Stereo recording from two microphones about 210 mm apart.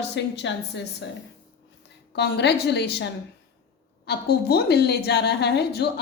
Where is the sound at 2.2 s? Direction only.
55° left (ahead or behind).